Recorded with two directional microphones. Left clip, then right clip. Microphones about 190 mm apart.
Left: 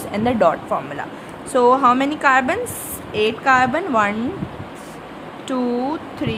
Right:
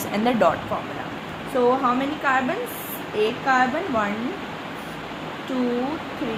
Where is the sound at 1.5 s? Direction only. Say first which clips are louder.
Left 6 dB; 40° left (ahead or behind).